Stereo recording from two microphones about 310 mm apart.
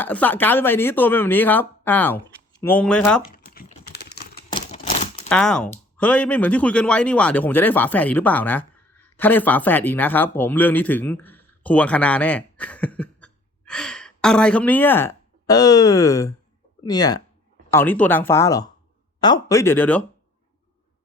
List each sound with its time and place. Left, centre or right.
0.0 s speech: centre
3.3 s computer keyboard: left
5.3 s a man's voice: centre